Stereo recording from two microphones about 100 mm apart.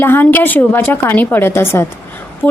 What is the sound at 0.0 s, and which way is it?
A woman's voice, 20° left (ahead or behind).